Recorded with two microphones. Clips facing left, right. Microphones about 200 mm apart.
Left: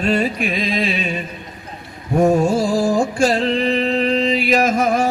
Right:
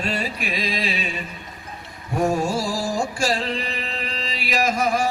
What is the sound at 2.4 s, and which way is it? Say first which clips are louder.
Music: left 7 dB; 60° left (ahead or behind).